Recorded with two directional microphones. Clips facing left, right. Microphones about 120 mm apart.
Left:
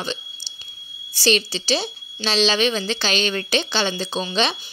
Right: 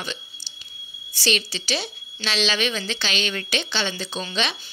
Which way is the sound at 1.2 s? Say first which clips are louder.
Left 5 dB; 35° left (ahead or behind).